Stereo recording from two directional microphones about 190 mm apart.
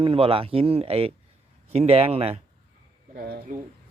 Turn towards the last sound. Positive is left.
turn(degrees=-50)  # may be behind; listen again after turning